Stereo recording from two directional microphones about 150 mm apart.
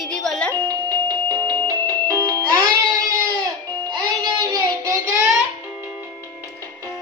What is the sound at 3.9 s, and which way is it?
Music, 30° right (ahead or behind).